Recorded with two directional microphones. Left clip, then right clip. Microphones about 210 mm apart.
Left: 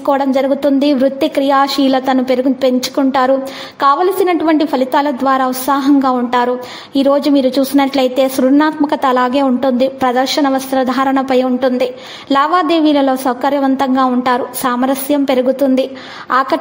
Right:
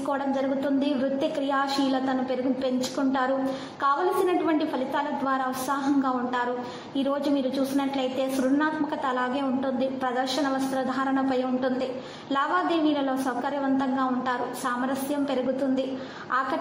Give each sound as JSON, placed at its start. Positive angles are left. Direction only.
{"t": 0.1, "sound": "a woman's voice", "side_deg": 50}